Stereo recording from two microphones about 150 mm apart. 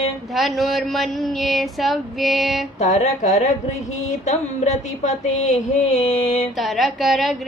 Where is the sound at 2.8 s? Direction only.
50° left (ahead or behind).